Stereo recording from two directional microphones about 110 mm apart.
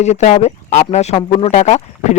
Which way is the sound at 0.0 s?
90° left.